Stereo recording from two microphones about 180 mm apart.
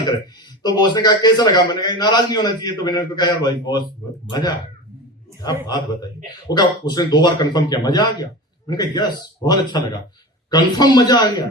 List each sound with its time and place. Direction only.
0.6 s a man's voice: 25° left (ahead or behind)
5.6 s a man's voice: 25° left (ahead or behind)